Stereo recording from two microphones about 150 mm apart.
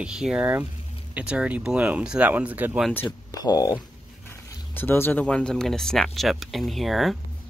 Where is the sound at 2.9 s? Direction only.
15° left (ahead or behind).